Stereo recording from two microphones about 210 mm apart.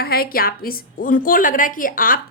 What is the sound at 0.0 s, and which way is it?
A woman's voice, 45° left (ahead or behind).